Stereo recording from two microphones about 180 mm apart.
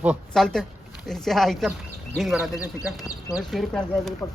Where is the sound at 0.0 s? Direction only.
5° right (ahead or behind).